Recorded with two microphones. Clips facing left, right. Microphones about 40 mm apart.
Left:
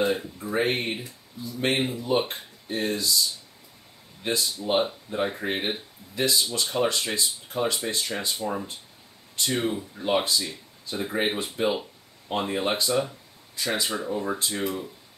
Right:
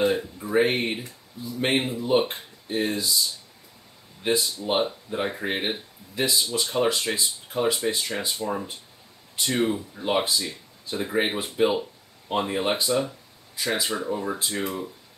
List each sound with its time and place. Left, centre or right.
0.0 s speech: centre
1.4 s speech: centre
4.2 s speech: centre